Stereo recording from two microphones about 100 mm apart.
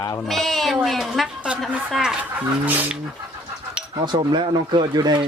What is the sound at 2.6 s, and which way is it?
Speech, 15° right (ahead or behind).